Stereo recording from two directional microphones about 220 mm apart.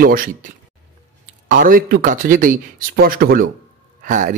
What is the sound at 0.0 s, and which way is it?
Speech, 40° right (ahead or behind).